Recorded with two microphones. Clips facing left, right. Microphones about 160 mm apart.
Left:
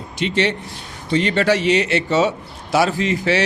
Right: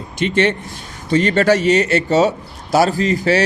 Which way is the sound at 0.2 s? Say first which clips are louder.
Right 3 dB; 50° right (ahead or behind).